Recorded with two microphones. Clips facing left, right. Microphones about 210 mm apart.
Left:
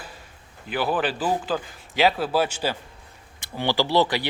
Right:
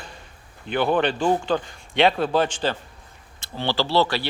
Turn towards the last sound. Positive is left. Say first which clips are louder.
# even
turn(degrees=15)  # may be behind; listen again after turning